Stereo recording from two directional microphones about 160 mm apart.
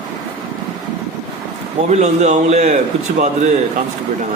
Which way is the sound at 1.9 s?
45° right (ahead or behind).